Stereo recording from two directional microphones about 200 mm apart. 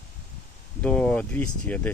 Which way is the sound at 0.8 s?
5° left (ahead or behind).